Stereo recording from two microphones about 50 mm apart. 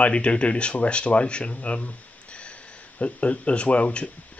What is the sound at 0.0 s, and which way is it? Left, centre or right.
Speech, left.